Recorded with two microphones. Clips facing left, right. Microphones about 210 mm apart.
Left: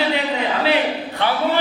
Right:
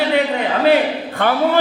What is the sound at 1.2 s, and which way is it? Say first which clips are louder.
Speech: right 4 dB; 50° right (ahead or behind).